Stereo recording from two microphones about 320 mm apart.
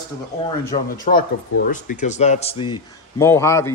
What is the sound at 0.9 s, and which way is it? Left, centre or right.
Speech, left.